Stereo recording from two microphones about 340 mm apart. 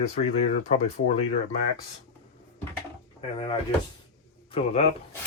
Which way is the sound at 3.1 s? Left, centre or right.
Centre.